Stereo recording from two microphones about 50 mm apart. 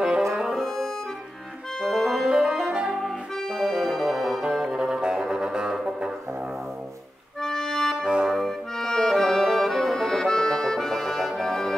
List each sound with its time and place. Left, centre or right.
0.6 s music: centre
2.2 s music: centre
2.9 s music: centre
7.4 s accordion: centre
8.0 s music: centre
8.3 s accordion: centre